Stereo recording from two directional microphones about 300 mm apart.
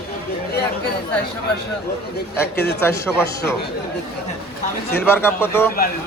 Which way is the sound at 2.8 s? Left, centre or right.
Centre.